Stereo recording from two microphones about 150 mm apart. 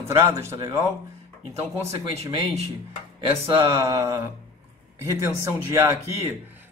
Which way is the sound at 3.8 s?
20° right (ahead or behind).